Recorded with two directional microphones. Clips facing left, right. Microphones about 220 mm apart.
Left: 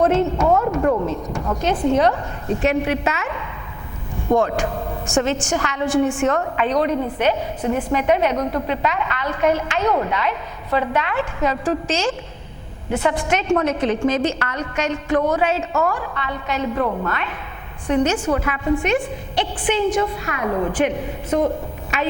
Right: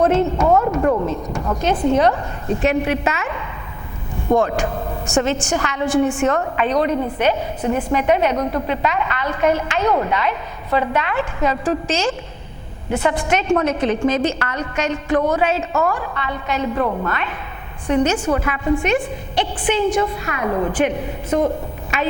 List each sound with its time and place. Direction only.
0.0 s a woman's voice: 15° right (ahead or behind)
0.4 s a sound: 20° right (ahead or behind)
1.6 s a woman's voice: 10° right (ahead or behind)
5.2 s a woman's voice: 10° right (ahead or behind)